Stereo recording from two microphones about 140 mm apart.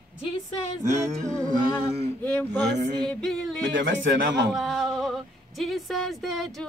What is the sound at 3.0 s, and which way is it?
Speech, 5° left (ahead or behind).